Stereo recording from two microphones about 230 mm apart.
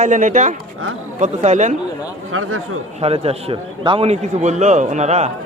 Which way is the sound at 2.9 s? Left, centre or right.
Right.